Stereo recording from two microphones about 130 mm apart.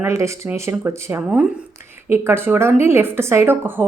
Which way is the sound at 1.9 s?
20° right (ahead or behind).